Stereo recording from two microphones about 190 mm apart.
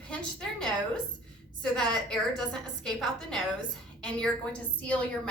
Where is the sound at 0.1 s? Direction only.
5° left (ahead or behind).